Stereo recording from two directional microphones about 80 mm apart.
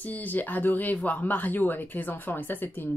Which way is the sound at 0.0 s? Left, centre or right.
Left.